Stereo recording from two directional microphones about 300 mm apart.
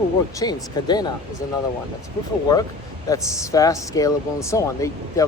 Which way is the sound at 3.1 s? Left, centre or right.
Centre.